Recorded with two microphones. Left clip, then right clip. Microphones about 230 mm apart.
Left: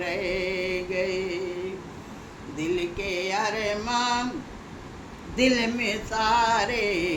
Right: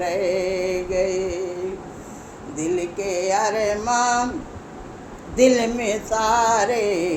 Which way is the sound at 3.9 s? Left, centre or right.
Left.